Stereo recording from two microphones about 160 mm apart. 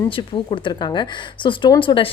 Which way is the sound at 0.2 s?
30° left (ahead or behind).